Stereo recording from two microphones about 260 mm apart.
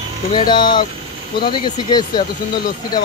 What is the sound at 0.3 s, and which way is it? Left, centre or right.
Speech, centre.